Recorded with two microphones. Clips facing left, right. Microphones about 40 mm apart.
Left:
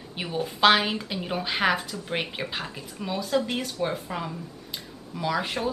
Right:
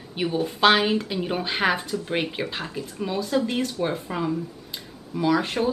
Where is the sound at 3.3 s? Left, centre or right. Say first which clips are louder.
Right 1 dB; right.